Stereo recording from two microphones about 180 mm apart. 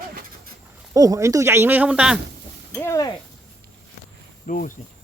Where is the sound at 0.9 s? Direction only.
20° right (ahead or behind).